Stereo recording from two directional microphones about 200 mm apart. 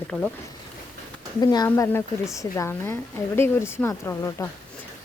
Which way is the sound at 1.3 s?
20° left (ahead or behind).